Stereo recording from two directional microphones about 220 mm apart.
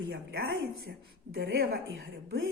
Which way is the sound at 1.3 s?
50° right (ahead or behind).